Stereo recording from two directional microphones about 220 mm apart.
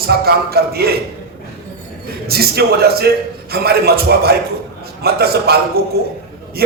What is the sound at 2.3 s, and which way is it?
A man's voice, 45° right (ahead or behind).